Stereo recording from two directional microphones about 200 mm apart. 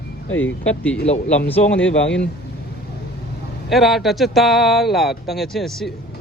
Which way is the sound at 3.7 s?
Centre (ahead or behind).